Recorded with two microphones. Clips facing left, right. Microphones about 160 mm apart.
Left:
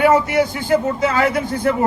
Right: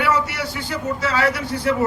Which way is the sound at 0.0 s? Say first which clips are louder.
Left 7 dB; 50° left (ahead or behind).